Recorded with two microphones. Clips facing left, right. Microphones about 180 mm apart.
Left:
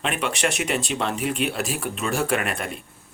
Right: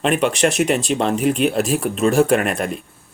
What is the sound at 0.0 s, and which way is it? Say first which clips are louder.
Speech: right 8 dB; 35° right (ahead or behind).